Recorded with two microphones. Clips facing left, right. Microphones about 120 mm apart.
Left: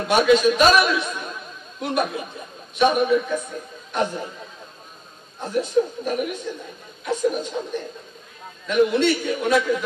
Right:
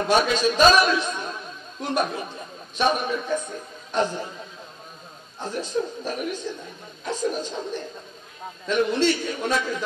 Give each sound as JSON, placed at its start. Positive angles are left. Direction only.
{"t": 0.1, "sound": "a man's voice", "side_deg": -30}
{"t": 5.4, "sound": "a man's voice", "side_deg": -30}